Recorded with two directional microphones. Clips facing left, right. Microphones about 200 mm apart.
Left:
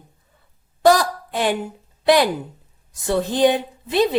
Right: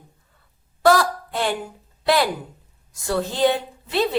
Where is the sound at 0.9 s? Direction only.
15° left (ahead or behind).